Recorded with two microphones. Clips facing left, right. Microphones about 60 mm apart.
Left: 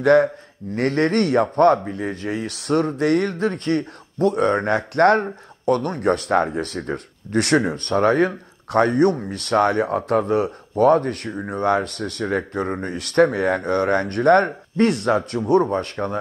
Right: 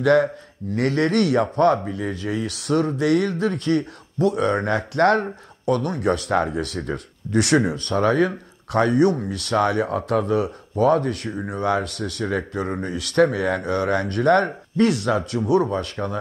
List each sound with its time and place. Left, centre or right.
0.0 s speech: left